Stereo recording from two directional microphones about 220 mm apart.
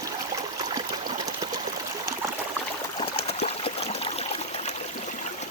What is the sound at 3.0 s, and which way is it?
Stream, 25° left (ahead or behind).